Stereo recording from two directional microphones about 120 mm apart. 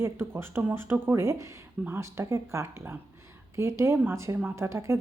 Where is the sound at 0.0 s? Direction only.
20° right (ahead or behind).